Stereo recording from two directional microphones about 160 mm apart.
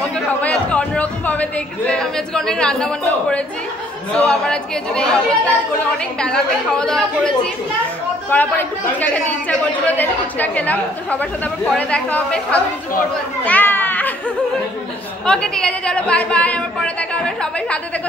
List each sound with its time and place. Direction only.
0.0 s a man's voice: 10° left (ahead or behind)
13.5 s children playing: 10° left (ahead or behind)
15.2 s a woman's voice: 5° left (ahead or behind)